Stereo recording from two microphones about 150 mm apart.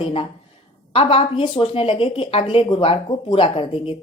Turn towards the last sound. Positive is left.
turn(degrees=35)  # may be behind; listen again after turning